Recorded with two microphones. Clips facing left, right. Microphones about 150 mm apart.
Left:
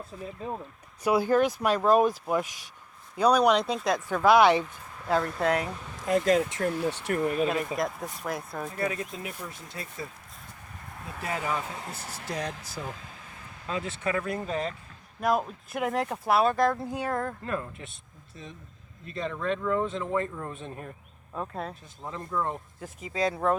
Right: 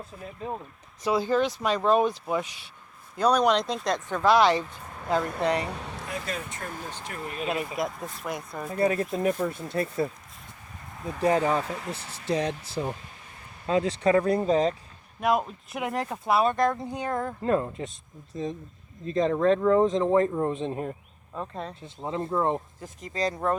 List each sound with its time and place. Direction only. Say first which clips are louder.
1.0 s speech: left 1 dB; 10° left (ahead or behind)
6.1 s speech: left 13 dB; 90° left
7.4 s speech: left 1 dB; 5° right (ahead or behind)
8.8 s speech: right 9 dB; 40° right (ahead or behind); by 10.1 s 60° right (ahead or behind)
11.2 s speech: right 8 dB; 35° right (ahead or behind)
15.7 s speech: left 2 dB; centre (ahead or behind)
17.4 s speech: right 8 dB; 30° right (ahead or behind)
18.3 s speech: right 13 dB; 40° right (ahead or behind)
21.3 s speech: even; centre (ahead or behind)
21.8 s speech: right 7 dB; 25° right (ahead or behind)
22.8 s speech: left 1 dB; 5° left (ahead or behind)